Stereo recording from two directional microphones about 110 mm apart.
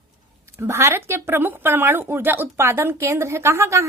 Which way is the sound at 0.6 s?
25° right (ahead or behind).